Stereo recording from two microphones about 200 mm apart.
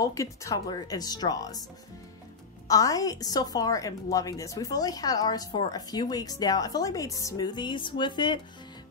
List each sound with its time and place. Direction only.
0.0 s a woman's voice: 15° left (ahead or behind)
2.7 s a woman's voice: 15° left (ahead or behind)